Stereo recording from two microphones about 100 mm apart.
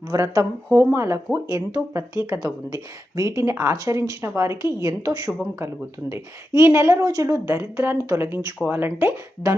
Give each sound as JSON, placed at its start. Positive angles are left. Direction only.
{"t": 0.1, "sound": "speech", "side_deg": -35}
{"t": 9.5, "sound": "speech", "side_deg": -35}